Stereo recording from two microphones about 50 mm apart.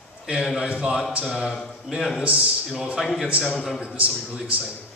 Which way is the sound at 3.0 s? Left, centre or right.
Centre.